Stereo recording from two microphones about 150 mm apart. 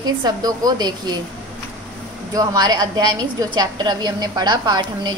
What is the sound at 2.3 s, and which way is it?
A woman's voice, 25° right (ahead or behind).